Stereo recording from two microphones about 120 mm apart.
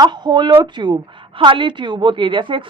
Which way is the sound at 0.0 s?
35° right (ahead or behind).